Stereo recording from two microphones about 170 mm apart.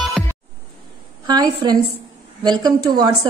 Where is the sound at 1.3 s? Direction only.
25° right (ahead or behind).